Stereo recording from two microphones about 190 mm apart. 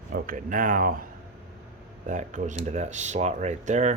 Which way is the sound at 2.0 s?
40° right (ahead or behind).